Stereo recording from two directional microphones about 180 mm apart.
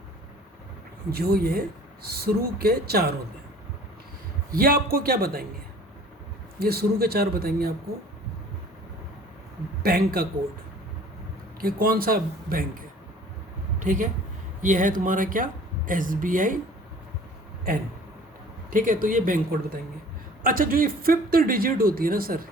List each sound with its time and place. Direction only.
1.1 s a man's voice: 60° right (ahead or behind)
4.5 s a man's voice: 55° right (ahead or behind)
6.6 s a man's voice: 60° right (ahead or behind)
9.8 s a man's voice: 60° right (ahead or behind)
11.6 s speech: 55° right (ahead or behind)
13.8 s speech: 45° right (ahead or behind)
18.7 s speech: 50° right (ahead or behind)